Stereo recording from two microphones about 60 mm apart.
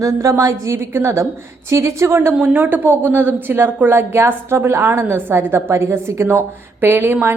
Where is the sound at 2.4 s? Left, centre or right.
Right.